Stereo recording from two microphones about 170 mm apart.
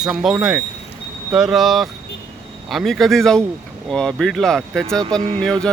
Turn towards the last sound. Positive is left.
turn(degrees=5)  # may be behind; listen again after turning